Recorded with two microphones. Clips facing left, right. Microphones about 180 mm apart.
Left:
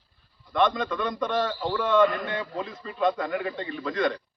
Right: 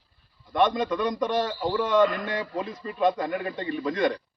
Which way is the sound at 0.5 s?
15° right (ahead or behind).